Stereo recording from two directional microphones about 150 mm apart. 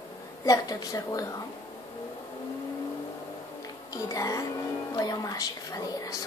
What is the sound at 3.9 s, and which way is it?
A woman's voice, 20° left (ahead or behind).